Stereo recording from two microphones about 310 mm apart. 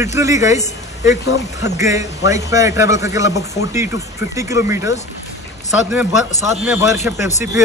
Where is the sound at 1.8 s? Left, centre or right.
Centre.